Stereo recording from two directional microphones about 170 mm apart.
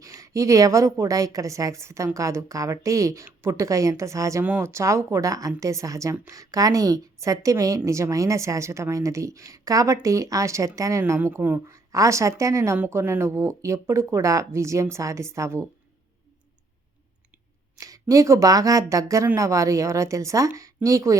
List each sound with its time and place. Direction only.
0.0 s a woman's voice: 20° right (ahead or behind)
17.7 s a woman's voice: 20° right (ahead or behind)